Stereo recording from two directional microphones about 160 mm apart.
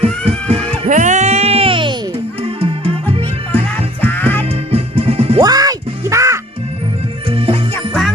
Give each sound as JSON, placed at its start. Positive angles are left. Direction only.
{"t": 0.3, "sound": "music", "side_deg": -40}
{"t": 0.9, "sound": "music", "side_deg": -50}
{"t": 4.0, "sound": "music", "side_deg": 10}
{"t": 4.7, "sound": "music", "side_deg": -35}
{"t": 5.4, "sound": "music", "side_deg": -25}
{"t": 7.3, "sound": "music", "side_deg": -35}
{"t": 7.8, "sound": "music", "side_deg": 0}